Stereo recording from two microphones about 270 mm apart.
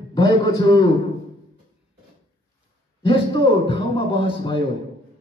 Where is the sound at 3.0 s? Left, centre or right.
Centre.